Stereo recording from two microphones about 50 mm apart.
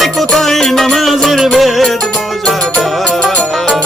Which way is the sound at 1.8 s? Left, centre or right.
Centre.